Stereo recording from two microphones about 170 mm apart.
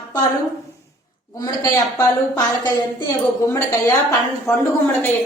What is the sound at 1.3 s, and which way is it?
A woman's voice, 20° left (ahead or behind).